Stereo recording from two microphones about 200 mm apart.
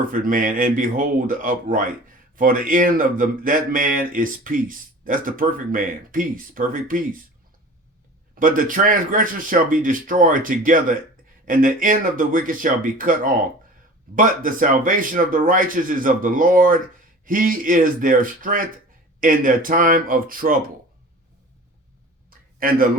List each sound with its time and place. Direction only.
0.1 s speech: 45° right (ahead or behind)
8.4 s speech: 45° right (ahead or behind)
22.3 s a sound: 45° right (ahead or behind)